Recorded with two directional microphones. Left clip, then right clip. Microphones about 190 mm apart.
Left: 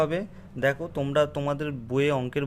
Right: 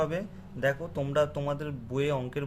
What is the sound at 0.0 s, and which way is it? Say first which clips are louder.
Speech: left 4 dB; 40° left (ahead or behind).